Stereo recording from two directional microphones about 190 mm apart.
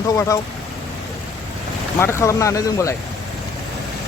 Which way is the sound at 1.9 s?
15° left (ahead or behind).